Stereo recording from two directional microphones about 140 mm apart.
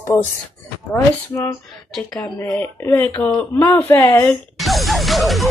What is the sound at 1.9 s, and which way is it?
Speech, 5° left (ahead or behind).